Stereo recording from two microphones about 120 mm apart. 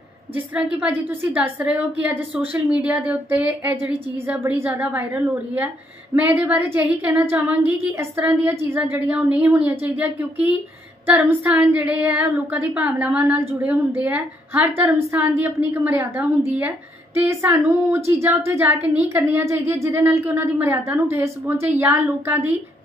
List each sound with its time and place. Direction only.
0.3 s a woman's voice: 10° right (ahead or behind)
6.2 s a woman's voice: 15° right (ahead or behind)